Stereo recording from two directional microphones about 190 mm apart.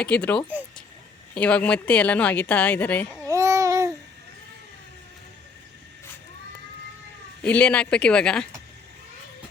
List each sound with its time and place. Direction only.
0.0 s speech: 5° left (ahead or behind)
3.2 s babbling: 15° right (ahead or behind)
7.4 s speech: 5° left (ahead or behind)